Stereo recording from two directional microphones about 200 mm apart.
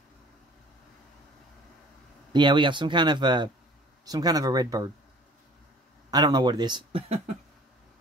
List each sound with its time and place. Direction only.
2.3 s speech: 25° right (ahead or behind)
6.0 s speech: 20° right (ahead or behind)